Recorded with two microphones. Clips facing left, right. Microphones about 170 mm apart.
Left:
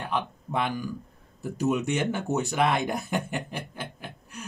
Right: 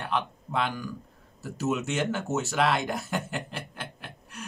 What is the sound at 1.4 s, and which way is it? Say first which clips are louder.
Speech: left 3 dB; 15° left (ahead or behind).